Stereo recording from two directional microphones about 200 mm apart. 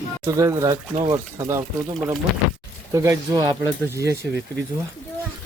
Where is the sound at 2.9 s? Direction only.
15° right (ahead or behind).